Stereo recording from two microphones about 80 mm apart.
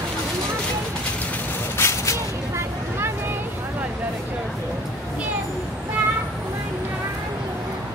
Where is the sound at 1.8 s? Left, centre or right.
Left.